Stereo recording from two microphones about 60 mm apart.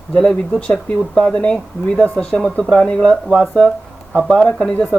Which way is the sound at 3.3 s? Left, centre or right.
Centre.